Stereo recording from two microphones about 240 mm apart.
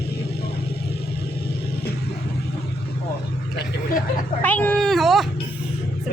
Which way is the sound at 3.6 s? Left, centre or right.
Left.